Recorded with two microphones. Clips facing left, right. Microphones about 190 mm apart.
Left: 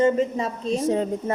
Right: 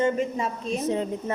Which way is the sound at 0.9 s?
45° left (ahead or behind).